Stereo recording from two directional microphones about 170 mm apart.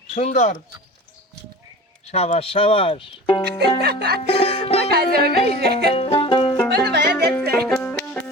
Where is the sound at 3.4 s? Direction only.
70° right (ahead or behind).